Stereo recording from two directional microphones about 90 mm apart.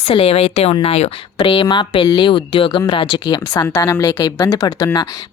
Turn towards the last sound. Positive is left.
turn(degrees=35)  # may be behind; listen again after turning